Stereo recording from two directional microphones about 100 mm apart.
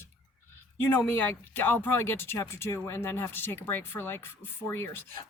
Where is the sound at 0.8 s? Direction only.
20° left (ahead or behind).